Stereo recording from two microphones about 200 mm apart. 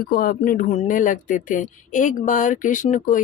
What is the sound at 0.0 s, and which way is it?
Speech, 45° left (ahead or behind).